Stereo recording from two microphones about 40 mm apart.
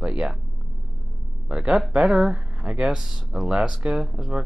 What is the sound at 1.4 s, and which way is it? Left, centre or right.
Speech, right.